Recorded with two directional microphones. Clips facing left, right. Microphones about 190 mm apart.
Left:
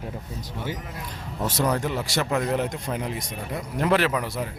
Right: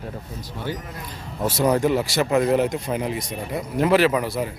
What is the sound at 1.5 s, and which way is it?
Speech, 10° right (ahead or behind).